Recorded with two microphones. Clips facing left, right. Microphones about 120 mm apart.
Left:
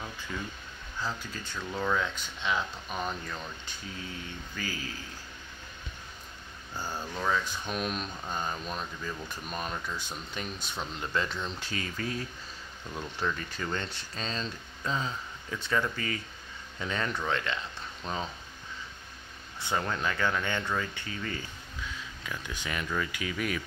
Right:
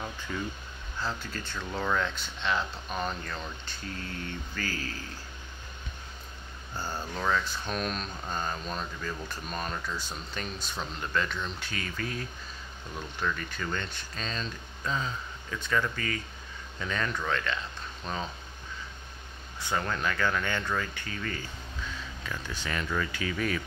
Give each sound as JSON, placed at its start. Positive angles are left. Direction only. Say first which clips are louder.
{"t": 0.3, "sound": "speech", "louder": "right 3 dB", "side_deg": 0}
{"t": 1.0, "sound": "speech", "louder": "right 1 dB", "side_deg": 10}
{"t": 1.7, "sound": "speech", "louder": "even", "side_deg": 0}
{"t": 7.2, "sound": "speech", "louder": "right 1 dB", "side_deg": 10}
{"t": 19.6, "sound": "speech", "louder": "even", "side_deg": 20}
{"t": 22.2, "sound": "speech", "louder": "right 1 dB", "side_deg": 10}